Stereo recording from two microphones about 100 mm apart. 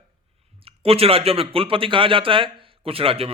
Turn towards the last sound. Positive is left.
turn(degrees=-70)  # may be behind; listen again after turning